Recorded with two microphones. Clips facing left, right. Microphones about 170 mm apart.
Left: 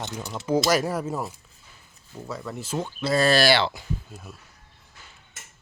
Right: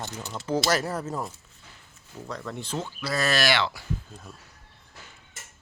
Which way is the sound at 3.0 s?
25° left (ahead or behind).